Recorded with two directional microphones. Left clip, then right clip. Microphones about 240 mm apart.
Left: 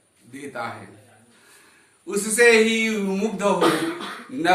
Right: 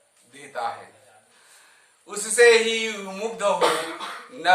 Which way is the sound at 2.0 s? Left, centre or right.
Centre.